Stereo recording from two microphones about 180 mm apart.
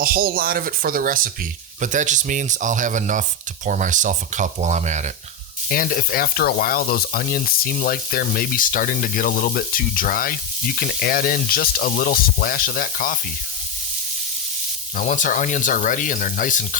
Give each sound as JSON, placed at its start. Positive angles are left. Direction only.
{"t": 0.0, "sound": "speech", "side_deg": -55}
{"t": 5.6, "sound": "speech", "side_deg": 55}
{"t": 14.9, "sound": "speech", "side_deg": 45}